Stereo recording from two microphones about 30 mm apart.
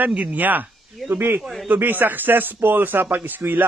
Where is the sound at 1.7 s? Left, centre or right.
Right.